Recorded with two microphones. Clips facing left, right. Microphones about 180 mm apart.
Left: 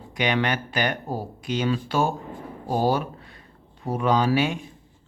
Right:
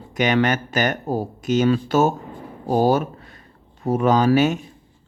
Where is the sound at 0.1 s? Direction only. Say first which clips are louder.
Right 5 dB; 45° right (ahead or behind).